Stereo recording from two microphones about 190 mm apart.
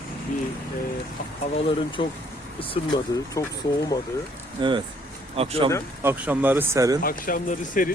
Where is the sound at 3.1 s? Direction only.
15° left (ahead or behind).